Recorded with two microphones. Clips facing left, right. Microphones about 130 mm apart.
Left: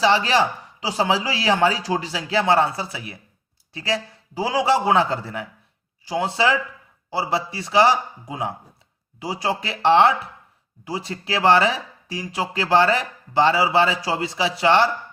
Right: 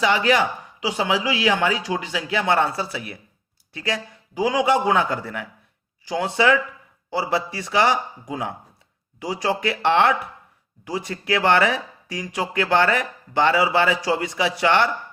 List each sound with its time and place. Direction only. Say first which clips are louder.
0.0 s speech: left 1 dB; 30° left (ahead or behind)